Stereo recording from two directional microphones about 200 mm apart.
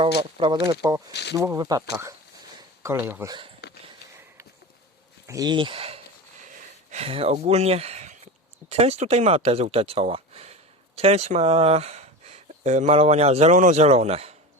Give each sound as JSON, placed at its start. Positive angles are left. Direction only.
{"t": 0.0, "sound": "speech", "side_deg": -25}
{"t": 1.1, "sound": "speech", "side_deg": 55}
{"t": 1.4, "sound": "speech", "side_deg": -15}
{"t": 3.6, "sound": "sniff", "side_deg": 55}
{"t": 5.2, "sound": "speech", "side_deg": -15}
{"t": 6.4, "sound": "a sound", "side_deg": -40}
{"t": 8.7, "sound": "speech", "side_deg": -30}